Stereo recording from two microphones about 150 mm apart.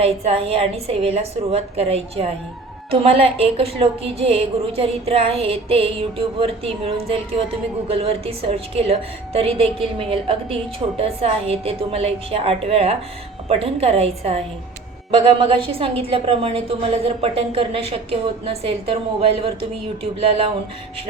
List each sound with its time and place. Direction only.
0.0 s a woman's voice: 40° right (ahead or behind)